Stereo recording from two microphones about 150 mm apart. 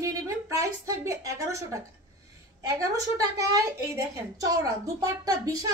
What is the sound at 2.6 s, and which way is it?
A woman's voice, 20° right (ahead or behind).